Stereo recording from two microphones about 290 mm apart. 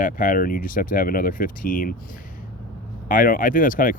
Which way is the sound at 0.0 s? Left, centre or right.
Left.